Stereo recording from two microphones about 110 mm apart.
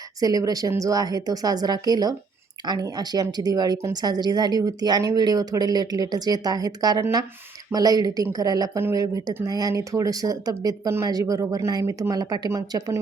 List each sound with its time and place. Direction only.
0.2 s speech: 35° right (ahead or behind)
12.5 s speech: 30° right (ahead or behind)